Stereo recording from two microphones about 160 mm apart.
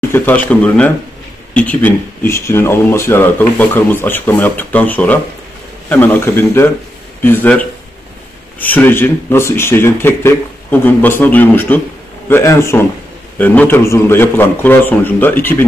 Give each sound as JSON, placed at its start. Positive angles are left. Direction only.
{"t": 0.1, "sound": "speech", "side_deg": 10}